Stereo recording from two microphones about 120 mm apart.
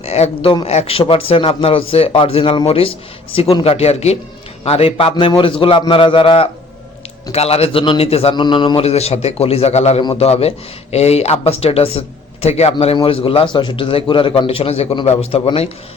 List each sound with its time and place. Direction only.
0.0 s a man's voice: 60° left (ahead or behind); by 8.8 s 40° left (ahead or behind)
8.8 s a man's voice: 60° left (ahead or behind)